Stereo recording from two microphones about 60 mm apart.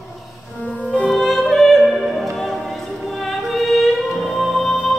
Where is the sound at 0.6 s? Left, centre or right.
Left.